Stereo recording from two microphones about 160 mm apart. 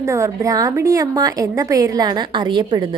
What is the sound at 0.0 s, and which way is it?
A woman's voice, 20° right (ahead or behind).